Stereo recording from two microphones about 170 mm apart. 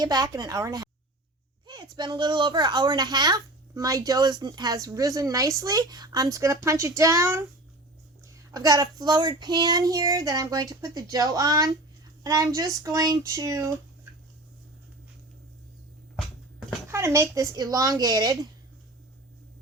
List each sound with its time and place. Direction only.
0.0 s speech: 20° right (ahead or behind)
16.9 s speech: 15° right (ahead or behind)